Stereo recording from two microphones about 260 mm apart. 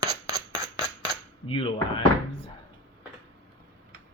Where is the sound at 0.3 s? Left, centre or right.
Centre.